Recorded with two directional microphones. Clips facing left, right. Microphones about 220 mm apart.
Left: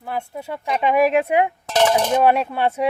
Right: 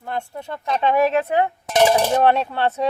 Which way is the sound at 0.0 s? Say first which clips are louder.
Even; 5° left (ahead or behind).